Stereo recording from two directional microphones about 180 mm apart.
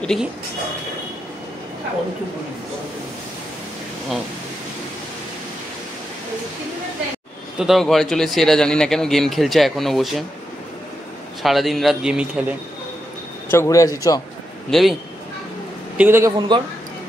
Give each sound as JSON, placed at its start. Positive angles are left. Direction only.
{"t": 0.0, "sound": "speech", "side_deg": 0}
{"t": 7.5, "sound": "speech", "side_deg": 0}
{"t": 11.4, "sound": "speech", "side_deg": 0}
{"t": 13.5, "sound": "a man's voice", "side_deg": 15}
{"t": 14.7, "sound": "speech", "side_deg": 0}
{"t": 16.0, "sound": "a man's voice", "side_deg": -15}
{"t": 16.3, "sound": "a man's voice", "side_deg": -25}